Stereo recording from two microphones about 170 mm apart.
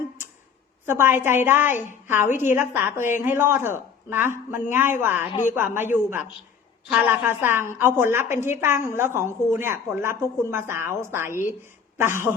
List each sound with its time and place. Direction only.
0.9 s a woman's voice: 15° right (ahead or behind)